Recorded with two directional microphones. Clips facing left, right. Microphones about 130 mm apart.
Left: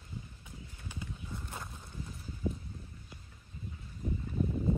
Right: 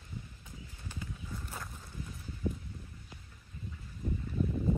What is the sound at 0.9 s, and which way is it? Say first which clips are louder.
Horse: even; 20° left (ahead or behind).